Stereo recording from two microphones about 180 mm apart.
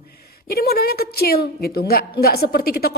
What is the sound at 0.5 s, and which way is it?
A woman's voice, 60° left (ahead or behind).